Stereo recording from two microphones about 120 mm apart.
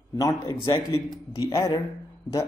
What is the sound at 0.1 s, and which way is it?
Speech, 30° left (ahead or behind).